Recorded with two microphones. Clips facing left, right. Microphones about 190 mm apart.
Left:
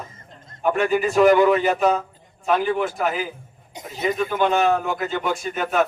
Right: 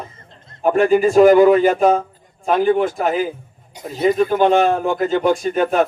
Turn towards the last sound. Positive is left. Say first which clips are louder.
# right 7 dB
turn(degrees=-30)  # may be behind; listen again after turning